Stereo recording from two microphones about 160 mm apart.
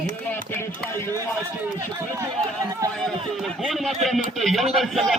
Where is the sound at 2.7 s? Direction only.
20° right (ahead or behind).